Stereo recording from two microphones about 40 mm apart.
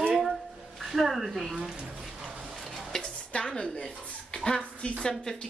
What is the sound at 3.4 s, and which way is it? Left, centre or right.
Speech, centre.